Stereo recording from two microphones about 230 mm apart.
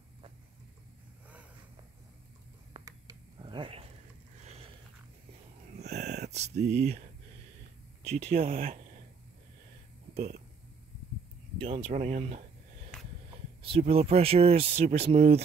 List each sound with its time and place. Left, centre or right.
2.8 s a sound: centre
5.9 s a sound: right
6.2 s speech: right
8.0 s speech: right
10.1 s speech: right
11.6 s speech: right